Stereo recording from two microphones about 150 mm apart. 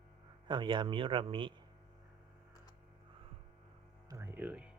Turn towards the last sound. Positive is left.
turn(degrees=-10)  # may be behind; listen again after turning